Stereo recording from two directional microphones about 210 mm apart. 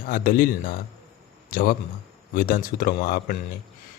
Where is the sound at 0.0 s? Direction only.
40° left (ahead or behind).